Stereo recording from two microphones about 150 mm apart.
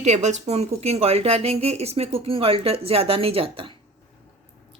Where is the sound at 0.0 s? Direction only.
50° right (ahead or behind).